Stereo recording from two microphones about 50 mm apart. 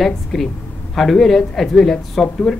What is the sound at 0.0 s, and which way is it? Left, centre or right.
Speech, centre.